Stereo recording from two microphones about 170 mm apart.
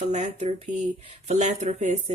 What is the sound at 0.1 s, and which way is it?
Speech, 40° right (ahead or behind).